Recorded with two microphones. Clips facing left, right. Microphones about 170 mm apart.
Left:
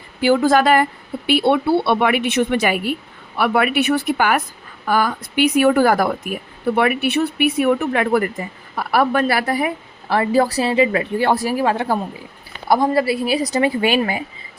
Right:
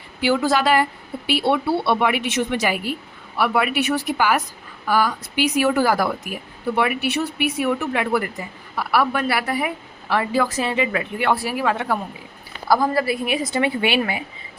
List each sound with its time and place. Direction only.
0.2 s a woman's voice: 50° left (ahead or behind)
10.1 s a woman's voice: 35° left (ahead or behind)